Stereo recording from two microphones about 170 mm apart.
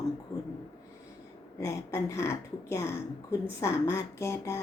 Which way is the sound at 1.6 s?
15° left (ahead or behind).